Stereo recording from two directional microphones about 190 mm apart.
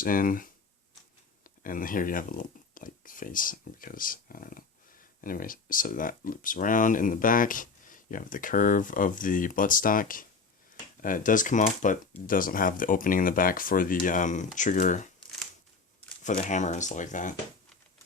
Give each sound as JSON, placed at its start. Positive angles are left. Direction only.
{"t": 0.0, "sound": "speech", "side_deg": 50}
{"t": 16.2, "sound": "speech", "side_deg": 40}